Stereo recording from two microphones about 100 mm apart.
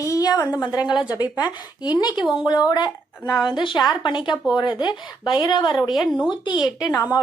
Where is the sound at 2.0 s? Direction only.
45° left (ahead or behind).